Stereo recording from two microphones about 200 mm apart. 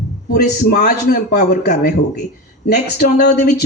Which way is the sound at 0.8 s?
45° left (ahead or behind).